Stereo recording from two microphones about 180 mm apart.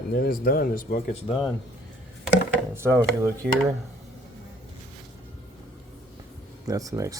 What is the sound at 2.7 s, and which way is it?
Speech, 15° right (ahead or behind).